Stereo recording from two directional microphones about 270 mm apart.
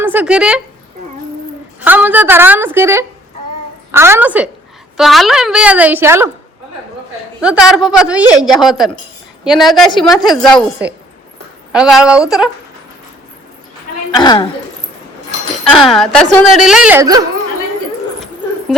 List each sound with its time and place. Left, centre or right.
0.0 s speech: centre
1.8 s a woman's voice: centre
7.4 s a woman's voice: centre
9.9 s a woman's voice: centre
10.2 s a woman's voice: centre
14.1 s a woman's voice: centre
15.7 s a woman's voice: centre